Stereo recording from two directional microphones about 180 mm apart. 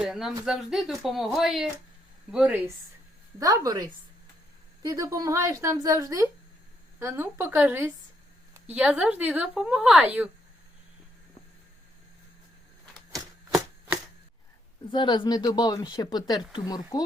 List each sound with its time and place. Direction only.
0.0 s a woman's voice: centre (ahead or behind)
3.4 s a woman's voice: 20° right (ahead or behind)
13.1 s a sound: 20° right (ahead or behind)
14.8 s speech: 25° left (ahead or behind)